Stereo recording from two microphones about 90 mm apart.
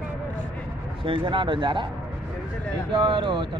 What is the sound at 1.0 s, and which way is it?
Speech, 70° right (ahead or behind).